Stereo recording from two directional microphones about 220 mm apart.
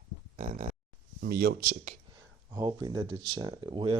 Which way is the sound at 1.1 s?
45° right (ahead or behind).